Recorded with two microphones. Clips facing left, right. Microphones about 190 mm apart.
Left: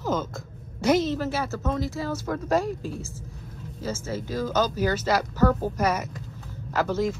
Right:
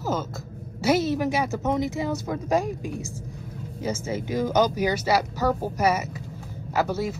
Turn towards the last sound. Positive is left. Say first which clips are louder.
# even
turn(degrees=-10)  # may be behind; listen again after turning